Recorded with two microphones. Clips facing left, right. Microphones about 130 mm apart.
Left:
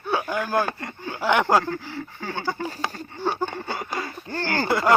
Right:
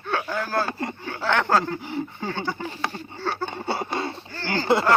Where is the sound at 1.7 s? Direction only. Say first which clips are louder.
Right 2 dB; 20° right (ahead or behind).